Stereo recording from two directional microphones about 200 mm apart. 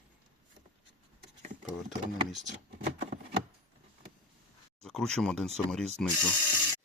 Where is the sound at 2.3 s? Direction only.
Centre (ahead or behind).